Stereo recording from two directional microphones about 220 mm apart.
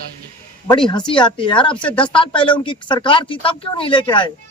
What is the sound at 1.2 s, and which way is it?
Speech, 20° left (ahead or behind).